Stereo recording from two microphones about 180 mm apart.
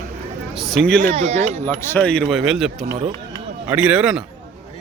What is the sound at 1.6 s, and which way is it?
A man's voice, 10° left (ahead or behind).